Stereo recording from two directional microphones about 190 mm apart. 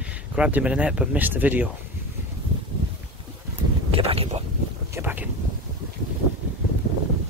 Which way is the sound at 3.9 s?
30° right (ahead or behind).